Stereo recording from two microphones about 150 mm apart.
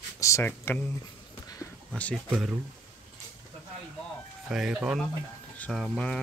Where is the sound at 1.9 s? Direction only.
10° left (ahead or behind).